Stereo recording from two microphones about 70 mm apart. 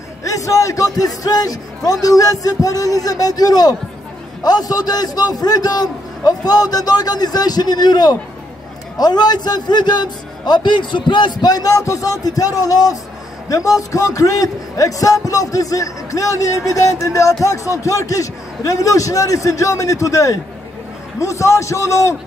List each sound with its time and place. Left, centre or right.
0.2 s a man's voice: left